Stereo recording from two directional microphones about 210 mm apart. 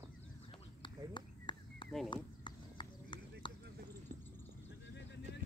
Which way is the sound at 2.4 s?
20° left (ahead or behind).